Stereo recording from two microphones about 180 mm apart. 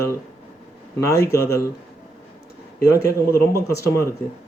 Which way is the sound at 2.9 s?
15° left (ahead or behind).